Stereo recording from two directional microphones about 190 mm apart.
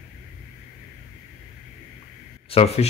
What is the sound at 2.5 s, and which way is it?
Speech, 35° left (ahead or behind).